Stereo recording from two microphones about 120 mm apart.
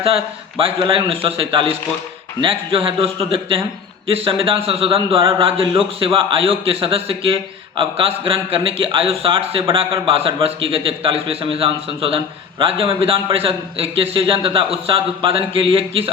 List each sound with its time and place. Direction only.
0.6 s a man's voice: 50° right (ahead or behind)